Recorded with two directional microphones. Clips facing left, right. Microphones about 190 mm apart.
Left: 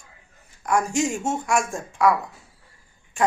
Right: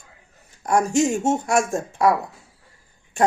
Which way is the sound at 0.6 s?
40° right (ahead or behind).